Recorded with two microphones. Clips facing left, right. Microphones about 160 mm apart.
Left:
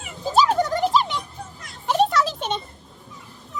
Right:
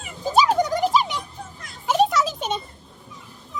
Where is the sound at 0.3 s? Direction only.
15° right (ahead or behind).